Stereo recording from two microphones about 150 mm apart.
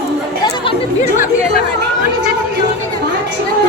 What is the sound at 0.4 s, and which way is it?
Chatter, 30° left (ahead or behind).